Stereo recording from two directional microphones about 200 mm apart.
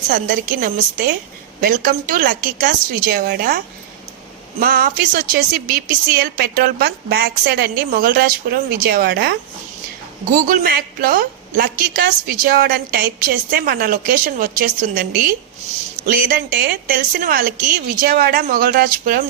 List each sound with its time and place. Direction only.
0.1 s a woman's voice: 45° right (ahead or behind)
4.6 s a woman's voice: 45° right (ahead or behind)
10.3 s a woman's voice: 40° right (ahead or behind)
16.0 s a woman's voice: 45° right (ahead or behind)